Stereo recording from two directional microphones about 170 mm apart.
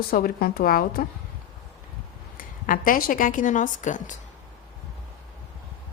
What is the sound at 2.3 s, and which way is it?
A woman's voice, 55° left (ahead or behind).